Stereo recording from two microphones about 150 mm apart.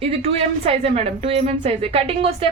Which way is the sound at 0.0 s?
40° right (ahead or behind).